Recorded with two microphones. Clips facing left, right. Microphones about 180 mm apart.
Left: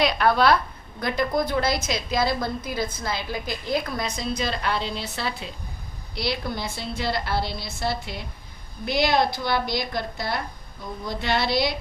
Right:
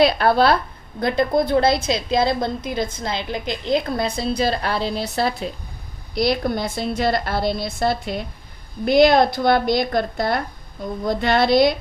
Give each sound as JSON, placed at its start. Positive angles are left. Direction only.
{"t": 0.0, "sound": "a woman's voice", "side_deg": -30}